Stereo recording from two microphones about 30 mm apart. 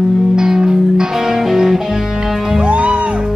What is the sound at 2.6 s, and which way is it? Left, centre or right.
Music, right.